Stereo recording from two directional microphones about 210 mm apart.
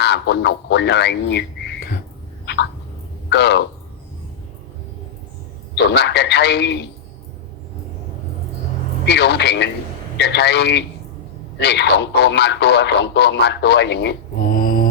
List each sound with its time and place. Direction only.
0.0 s speech: 55° left (ahead or behind)
2.5 s a sound: 55° left (ahead or behind)
3.2 s speech: 55° left (ahead or behind)
5.7 s speech: 50° left (ahead or behind)
9.0 s speech: 55° left (ahead or behind)